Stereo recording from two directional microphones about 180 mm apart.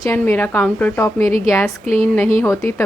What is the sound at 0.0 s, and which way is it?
Speech, 15° left (ahead or behind).